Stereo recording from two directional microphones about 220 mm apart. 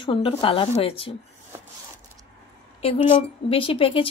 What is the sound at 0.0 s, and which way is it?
Speech, 25° left (ahead or behind).